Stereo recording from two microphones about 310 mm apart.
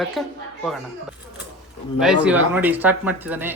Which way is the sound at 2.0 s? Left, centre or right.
Centre.